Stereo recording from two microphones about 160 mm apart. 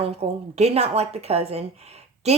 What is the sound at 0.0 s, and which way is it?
A woman's voice, 40° right (ahead or behind).